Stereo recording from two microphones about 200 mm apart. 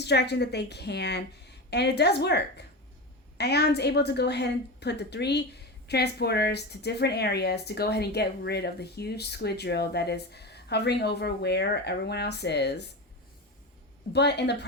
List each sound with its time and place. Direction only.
0.0 s speech: 55° left (ahead or behind)
14.1 s speech: 55° left (ahead or behind)